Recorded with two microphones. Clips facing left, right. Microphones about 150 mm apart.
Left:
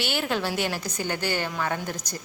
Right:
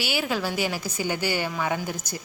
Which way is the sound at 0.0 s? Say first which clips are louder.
Even; 5° right (ahead or behind).